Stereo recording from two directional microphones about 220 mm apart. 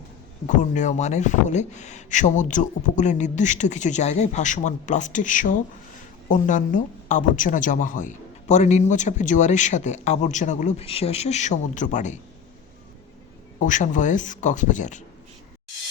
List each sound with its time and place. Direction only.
0.4 s speech: 35° left (ahead or behind)
13.6 s speech: 35° left (ahead or behind)